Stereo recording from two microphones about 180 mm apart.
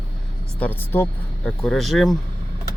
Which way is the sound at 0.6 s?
10° left (ahead or behind).